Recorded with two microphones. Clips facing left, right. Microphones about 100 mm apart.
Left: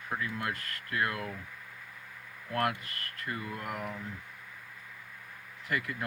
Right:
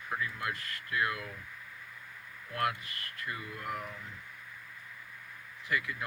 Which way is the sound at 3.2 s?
45° left (ahead or behind).